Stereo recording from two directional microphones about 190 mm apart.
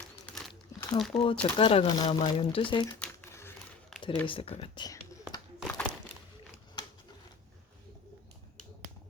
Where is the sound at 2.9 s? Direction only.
10° left (ahead or behind).